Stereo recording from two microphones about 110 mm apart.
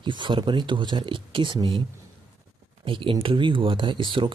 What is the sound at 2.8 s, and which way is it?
Speech, 50° right (ahead or behind).